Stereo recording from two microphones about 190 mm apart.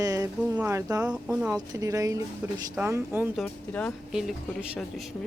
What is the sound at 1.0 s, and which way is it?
Speech, 5° right (ahead or behind).